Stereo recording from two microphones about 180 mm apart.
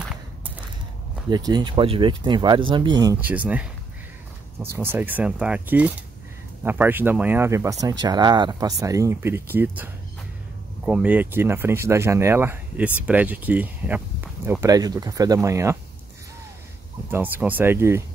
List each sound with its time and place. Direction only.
1.3 s speech: 25° right (ahead or behind)
3.2 s speech: 10° right (ahead or behind)
4.7 s speech: 10° right (ahead or behind)
10.9 s speech: 10° right (ahead or behind)
17.1 s speech: 10° right (ahead or behind)